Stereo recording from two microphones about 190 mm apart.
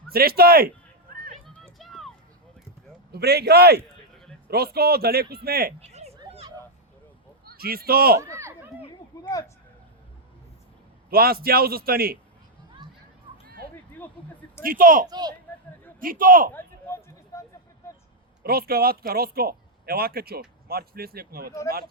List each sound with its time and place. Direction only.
0.1 s speech: 55° right (ahead or behind)
1.6 s music: centre (ahead or behind)
3.1 s speech: 60° right (ahead or behind)
5.8 s a sound: 35° right (ahead or behind)
7.4 s speech: 50° right (ahead or behind)
8.2 s a sound: 15° right (ahead or behind)
9.0 s a sound: 20° left (ahead or behind)
11.1 s speech: 50° right (ahead or behind)
14.6 s speech: 50° right (ahead or behind)
15.0 s a child's voice: 20° right (ahead or behind)
16.0 s speech: 45° right (ahead or behind)
16.6 s a sound: 15° left (ahead or behind)
18.4 s speech: 55° right (ahead or behind)